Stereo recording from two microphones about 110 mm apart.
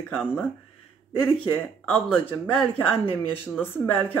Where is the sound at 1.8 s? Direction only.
15° left (ahead or behind).